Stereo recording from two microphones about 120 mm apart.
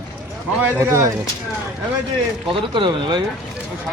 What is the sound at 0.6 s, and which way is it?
Speech, 25° right (ahead or behind).